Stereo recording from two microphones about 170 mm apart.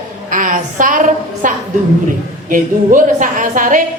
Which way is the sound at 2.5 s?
50° right (ahead or behind).